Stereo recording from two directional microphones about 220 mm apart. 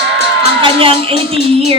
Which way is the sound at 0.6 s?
25° right (ahead or behind).